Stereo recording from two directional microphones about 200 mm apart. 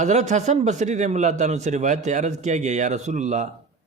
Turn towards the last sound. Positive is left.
turn(degrees=-35)  # may be behind; listen again after turning